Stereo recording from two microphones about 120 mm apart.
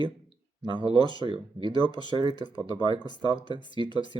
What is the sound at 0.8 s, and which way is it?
Speech, 35° left (ahead or behind).